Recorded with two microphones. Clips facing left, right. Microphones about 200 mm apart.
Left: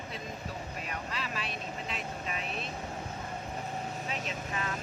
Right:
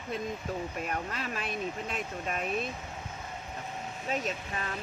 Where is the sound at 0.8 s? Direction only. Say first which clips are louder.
Right 4 dB; 50° right (ahead or behind).